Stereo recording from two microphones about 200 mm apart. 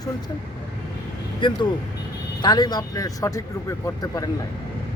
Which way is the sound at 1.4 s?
20° left (ahead or behind).